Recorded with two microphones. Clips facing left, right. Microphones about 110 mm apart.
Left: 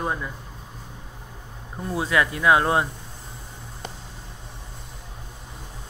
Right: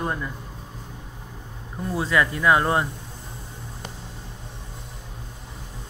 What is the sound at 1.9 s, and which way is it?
Speech, 15° left (ahead or behind).